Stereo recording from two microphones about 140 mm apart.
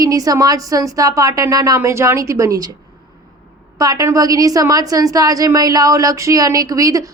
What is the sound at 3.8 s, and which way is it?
A woman's voice, 25° right (ahead or behind).